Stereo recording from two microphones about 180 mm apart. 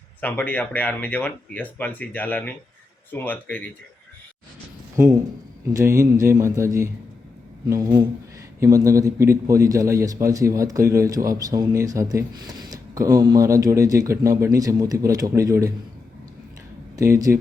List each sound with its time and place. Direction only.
0.2 s speech: 10° left (ahead or behind)
4.9 s a man's voice: 15° right (ahead or behind)
17.0 s a man's voice: 15° right (ahead or behind)